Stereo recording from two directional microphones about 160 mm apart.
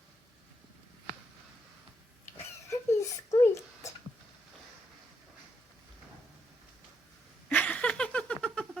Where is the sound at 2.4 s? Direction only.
15° left (ahead or behind).